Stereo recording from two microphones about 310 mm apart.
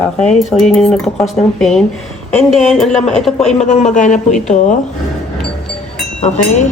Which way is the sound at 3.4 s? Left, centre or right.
Left.